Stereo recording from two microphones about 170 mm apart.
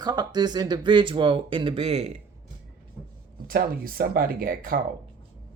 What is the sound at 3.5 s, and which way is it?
Speech, 60° right (ahead or behind).